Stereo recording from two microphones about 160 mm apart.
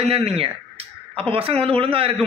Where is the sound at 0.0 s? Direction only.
40° right (ahead or behind).